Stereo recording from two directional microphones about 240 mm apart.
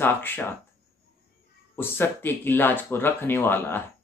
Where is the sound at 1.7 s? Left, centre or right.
Centre.